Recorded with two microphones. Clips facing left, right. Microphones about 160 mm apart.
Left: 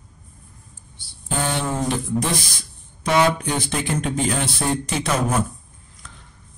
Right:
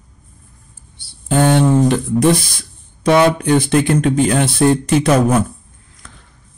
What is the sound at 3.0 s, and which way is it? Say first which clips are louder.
Speech: right 6 dB; 60° right (ahead or behind).